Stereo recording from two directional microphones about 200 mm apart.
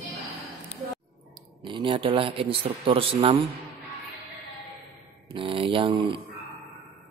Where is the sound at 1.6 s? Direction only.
25° right (ahead or behind).